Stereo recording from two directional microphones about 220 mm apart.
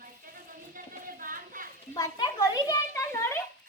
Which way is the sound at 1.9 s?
15° left (ahead or behind).